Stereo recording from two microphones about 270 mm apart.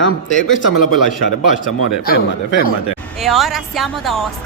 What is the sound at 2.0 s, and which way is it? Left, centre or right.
Speech, left.